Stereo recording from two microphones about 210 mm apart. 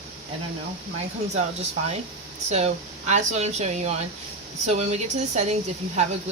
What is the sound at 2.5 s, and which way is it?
Speech, 30° right (ahead or behind).